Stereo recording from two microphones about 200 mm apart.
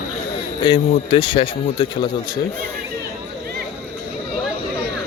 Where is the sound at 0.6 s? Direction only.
25° left (ahead or behind).